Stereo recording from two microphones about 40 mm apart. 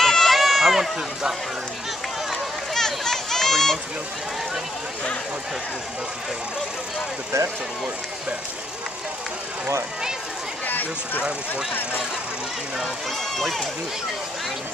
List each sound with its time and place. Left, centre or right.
0.0 s run: centre
2.7 s a sound: centre
10.7 s speech: left
13.4 s speech: centre